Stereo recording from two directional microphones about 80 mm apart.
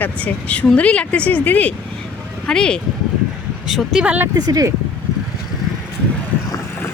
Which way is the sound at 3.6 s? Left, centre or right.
Centre.